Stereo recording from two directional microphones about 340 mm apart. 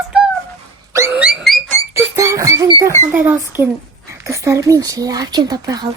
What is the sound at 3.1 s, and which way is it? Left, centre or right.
Speech, centre.